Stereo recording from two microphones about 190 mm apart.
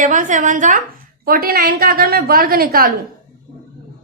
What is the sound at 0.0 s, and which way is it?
A woman's voice, 40° right (ahead or behind).